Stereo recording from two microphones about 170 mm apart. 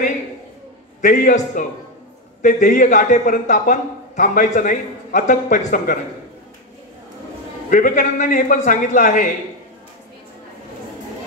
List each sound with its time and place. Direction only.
1.0 s a man's voice: 45° left (ahead or behind)
7.7 s a man's voice: 50° left (ahead or behind)